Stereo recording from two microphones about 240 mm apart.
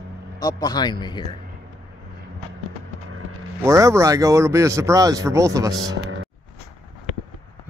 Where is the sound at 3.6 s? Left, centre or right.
Centre.